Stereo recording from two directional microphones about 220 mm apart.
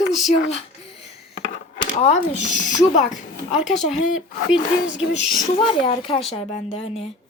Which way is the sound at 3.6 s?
Centre (ahead or behind).